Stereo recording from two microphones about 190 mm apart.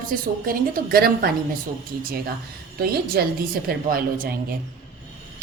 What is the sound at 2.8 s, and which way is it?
A woman's voice, 55° right (ahead or behind).